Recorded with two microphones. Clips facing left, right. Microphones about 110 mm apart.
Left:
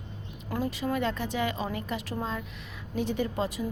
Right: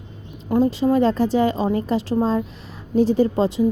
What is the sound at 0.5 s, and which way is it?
A woman's voice, 25° right (ahead or behind).